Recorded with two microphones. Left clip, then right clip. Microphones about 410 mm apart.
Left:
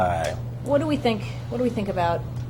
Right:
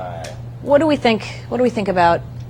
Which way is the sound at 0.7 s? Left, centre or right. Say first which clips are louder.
Right 8 dB; right.